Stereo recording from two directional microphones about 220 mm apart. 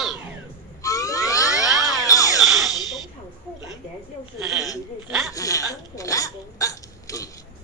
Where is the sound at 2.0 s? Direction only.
15° left (ahead or behind).